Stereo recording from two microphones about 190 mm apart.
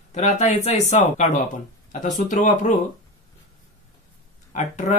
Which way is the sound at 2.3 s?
40° left (ahead or behind).